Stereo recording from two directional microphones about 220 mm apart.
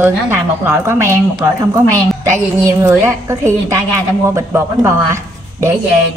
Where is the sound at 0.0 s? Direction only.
10° right (ahead or behind).